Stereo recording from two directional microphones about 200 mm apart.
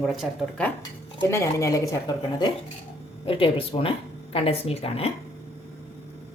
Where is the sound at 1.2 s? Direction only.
15° left (ahead or behind); by 5.1 s 30° left (ahead or behind).